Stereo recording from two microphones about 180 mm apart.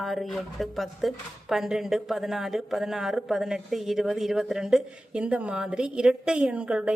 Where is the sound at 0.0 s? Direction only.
Centre (ahead or behind).